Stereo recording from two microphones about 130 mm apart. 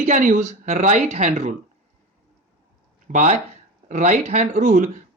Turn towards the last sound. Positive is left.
turn(degrees=-70)  # may be behind; listen again after turning